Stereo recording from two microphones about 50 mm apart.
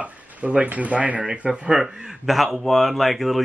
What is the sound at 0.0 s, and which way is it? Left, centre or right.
Speech, right.